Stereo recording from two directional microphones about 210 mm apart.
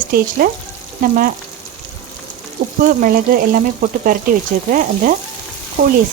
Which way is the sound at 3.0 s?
40° right (ahead or behind).